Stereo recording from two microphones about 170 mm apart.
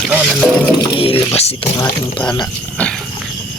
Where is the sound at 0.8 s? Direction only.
30° left (ahead or behind).